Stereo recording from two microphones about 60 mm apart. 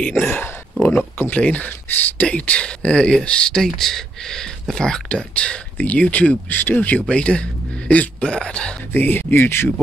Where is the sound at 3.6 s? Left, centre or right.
Centre; by 7.0 s left.